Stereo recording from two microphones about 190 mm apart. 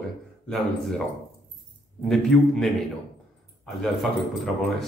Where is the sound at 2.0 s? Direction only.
Centre (ahead or behind).